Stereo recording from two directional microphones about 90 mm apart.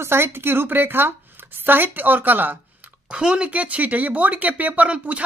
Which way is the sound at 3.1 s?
10° right (ahead or behind).